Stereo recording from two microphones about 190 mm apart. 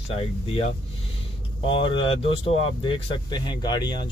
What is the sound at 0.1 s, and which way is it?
Speech, 30° left (ahead or behind).